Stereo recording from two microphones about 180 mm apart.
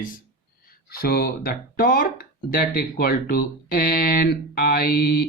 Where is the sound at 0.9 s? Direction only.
55° left (ahead or behind).